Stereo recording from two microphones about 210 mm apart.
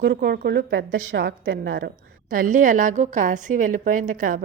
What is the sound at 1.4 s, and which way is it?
A woman's voice, 65° right (ahead or behind).